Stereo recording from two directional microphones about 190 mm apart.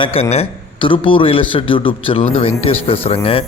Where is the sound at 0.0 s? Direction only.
30° left (ahead or behind).